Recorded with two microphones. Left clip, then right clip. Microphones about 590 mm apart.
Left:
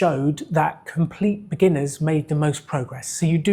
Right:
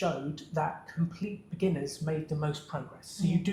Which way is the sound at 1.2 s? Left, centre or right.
Left.